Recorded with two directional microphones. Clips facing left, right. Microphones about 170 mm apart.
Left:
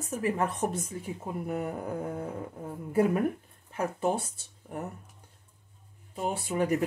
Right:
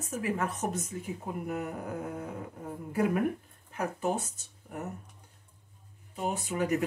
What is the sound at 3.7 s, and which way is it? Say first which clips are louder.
Speech: left 2 dB; 35° left (ahead or behind).